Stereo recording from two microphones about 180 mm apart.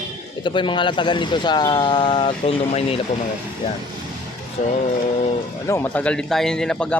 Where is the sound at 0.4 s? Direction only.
25° left (ahead or behind).